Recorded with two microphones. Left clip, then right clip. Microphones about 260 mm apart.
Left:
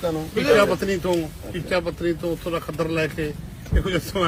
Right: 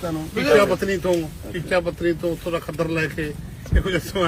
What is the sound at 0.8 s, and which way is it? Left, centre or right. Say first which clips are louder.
Speech: right 1 dB; centre.